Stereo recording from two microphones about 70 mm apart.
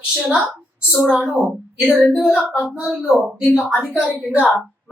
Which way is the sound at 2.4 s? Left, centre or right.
Centre.